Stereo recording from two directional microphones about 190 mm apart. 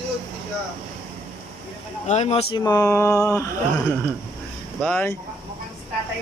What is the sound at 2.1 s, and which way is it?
Speech, 35° left (ahead or behind).